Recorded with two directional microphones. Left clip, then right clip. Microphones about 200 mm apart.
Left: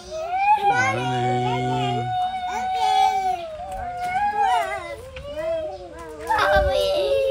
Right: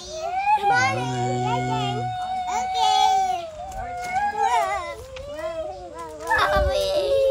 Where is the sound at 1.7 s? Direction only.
5° right (ahead or behind).